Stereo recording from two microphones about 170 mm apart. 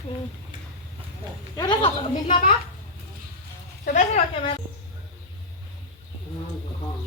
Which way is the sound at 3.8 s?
45° left (ahead or behind).